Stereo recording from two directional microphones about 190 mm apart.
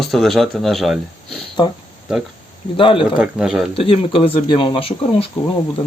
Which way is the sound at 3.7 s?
30° left (ahead or behind).